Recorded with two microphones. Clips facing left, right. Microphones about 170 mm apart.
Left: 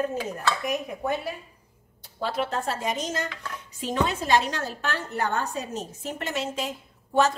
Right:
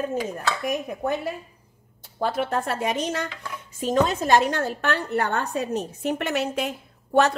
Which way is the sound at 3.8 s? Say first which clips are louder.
Right 5 dB; 45° right (ahead or behind).